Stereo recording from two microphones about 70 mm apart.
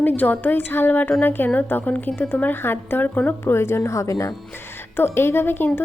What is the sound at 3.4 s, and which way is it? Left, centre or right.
Speech, left.